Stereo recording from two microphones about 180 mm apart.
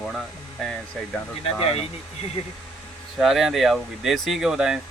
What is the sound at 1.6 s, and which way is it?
Speech, 35° left (ahead or behind).